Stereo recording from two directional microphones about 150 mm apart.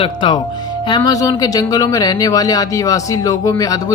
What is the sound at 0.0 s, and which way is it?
Speech, 35° left (ahead or behind).